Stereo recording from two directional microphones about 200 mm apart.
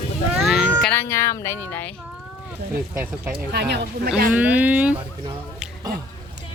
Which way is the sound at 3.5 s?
55° right (ahead or behind).